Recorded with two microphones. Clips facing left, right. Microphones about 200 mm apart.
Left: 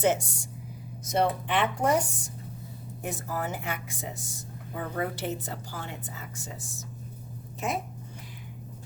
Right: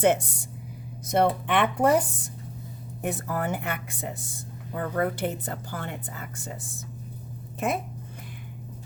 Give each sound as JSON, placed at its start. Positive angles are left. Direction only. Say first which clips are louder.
{"t": 0.0, "sound": "speech", "louder": "right 3 dB", "side_deg": -60}